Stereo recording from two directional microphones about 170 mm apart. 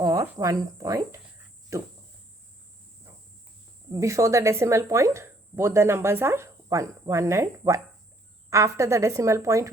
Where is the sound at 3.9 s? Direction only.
20° right (ahead or behind).